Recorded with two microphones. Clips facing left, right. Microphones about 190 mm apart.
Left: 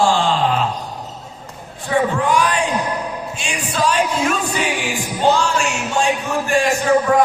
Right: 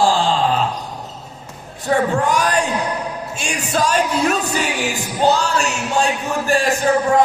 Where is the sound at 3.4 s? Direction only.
45° right (ahead or behind).